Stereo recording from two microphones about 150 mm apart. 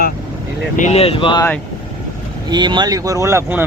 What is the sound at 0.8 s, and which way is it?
Speech, 45° left (ahead or behind).